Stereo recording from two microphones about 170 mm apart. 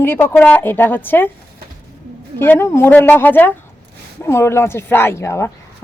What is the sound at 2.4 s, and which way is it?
Speech, 15° left (ahead or behind).